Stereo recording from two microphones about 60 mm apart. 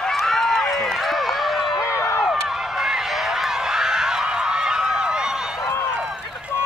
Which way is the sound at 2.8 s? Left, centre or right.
Centre.